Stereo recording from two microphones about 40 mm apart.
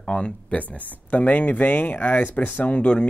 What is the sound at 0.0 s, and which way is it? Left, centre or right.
Speech, left.